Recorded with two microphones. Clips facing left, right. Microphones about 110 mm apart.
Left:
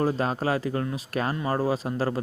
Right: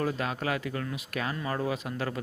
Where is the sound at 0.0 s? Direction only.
35° left (ahead or behind).